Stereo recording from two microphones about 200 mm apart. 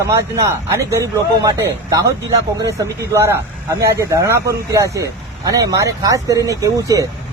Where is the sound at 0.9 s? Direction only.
15° right (ahead or behind).